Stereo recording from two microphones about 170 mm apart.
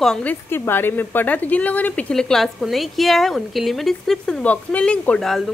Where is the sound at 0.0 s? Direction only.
5° left (ahead or behind).